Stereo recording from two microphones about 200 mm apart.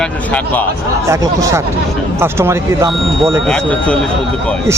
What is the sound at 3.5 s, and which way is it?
Speech, 5° left (ahead or behind).